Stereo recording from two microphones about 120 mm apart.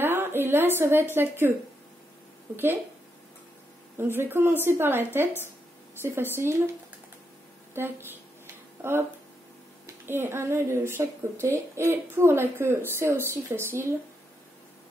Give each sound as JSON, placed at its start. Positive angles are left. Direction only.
{"t": 0.0, "sound": "a woman's voice", "side_deg": -20}
{"t": 2.5, "sound": "speech", "side_deg": -20}
{"t": 4.0, "sound": "a woman's voice", "side_deg": -20}
{"t": 7.7, "sound": "speech", "side_deg": -20}
{"t": 10.0, "sound": "speech", "side_deg": -20}